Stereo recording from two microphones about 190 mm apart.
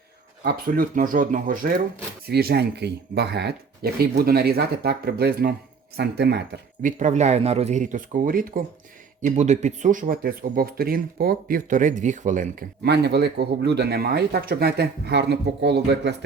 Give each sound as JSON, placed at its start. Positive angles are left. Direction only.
{"t": 0.4, "sound": "speech", "side_deg": -50}
{"t": 6.8, "sound": "speech", "side_deg": -40}